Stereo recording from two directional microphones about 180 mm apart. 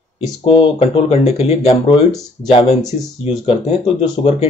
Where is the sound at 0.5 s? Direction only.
30° left (ahead or behind).